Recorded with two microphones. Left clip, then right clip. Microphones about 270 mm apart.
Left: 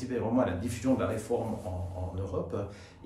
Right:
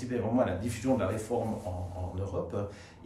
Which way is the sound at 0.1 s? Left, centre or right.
Centre.